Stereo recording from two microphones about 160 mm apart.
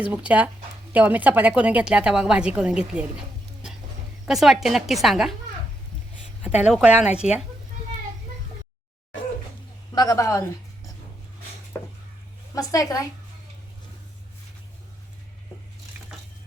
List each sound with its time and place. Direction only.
0.0 s a woman's voice: 10° right (ahead or behind)
4.3 s a woman's voice: centre (ahead or behind)
6.4 s a woman's voice: 5° right (ahead or behind)
9.9 s a woman's voice: 25° left (ahead or behind)
11.7 s a sound: 15° left (ahead or behind)
12.5 s a woman's voice: 20° left (ahead or behind)